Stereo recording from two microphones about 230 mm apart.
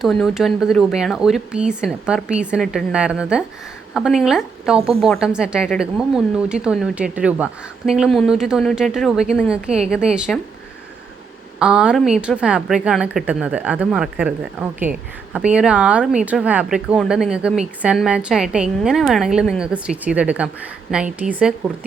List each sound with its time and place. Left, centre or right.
0.0 s a woman's voice: centre
11.6 s a woman's voice: centre